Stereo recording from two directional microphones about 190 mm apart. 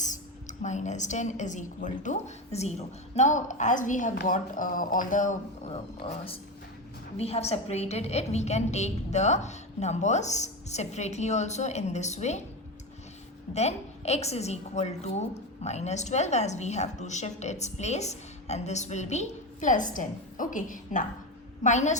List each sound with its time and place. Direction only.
0.0 s a woman's voice: 40° left (ahead or behind)
13.5 s a woman's voice: 35° left (ahead or behind)